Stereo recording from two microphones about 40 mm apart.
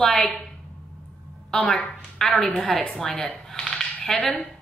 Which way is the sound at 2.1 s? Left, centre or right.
Centre.